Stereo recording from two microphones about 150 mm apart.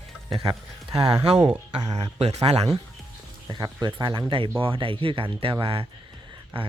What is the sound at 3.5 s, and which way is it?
Speech, 25° right (ahead or behind).